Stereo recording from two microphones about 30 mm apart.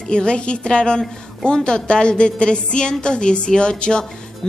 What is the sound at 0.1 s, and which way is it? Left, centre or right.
A woman's voice, left.